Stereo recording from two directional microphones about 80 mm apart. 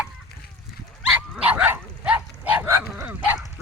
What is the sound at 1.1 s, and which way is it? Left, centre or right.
Dog, centre.